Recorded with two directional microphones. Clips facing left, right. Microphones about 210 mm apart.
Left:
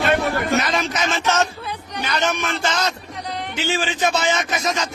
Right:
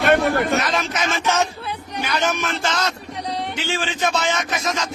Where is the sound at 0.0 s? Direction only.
55° right (ahead or behind).